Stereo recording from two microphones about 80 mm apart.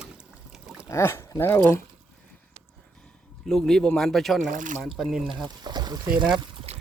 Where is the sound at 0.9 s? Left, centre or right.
Left.